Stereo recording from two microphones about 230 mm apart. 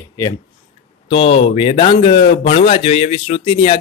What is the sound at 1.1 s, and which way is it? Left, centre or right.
Speech, left.